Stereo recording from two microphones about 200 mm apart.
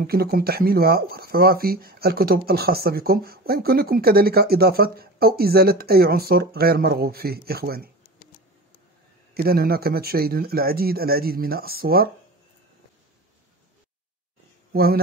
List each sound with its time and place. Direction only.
0.0 s speech: 50° right (ahead or behind)
9.3 s speech: 50° right (ahead or behind)
14.7 s speech: 50° right (ahead or behind)